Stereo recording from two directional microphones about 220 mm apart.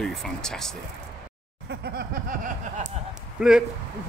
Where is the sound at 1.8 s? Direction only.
40° right (ahead or behind).